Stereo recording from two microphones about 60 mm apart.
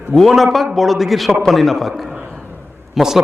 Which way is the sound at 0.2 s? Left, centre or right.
Centre.